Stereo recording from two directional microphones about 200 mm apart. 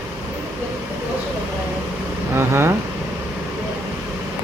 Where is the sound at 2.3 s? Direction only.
15° right (ahead or behind).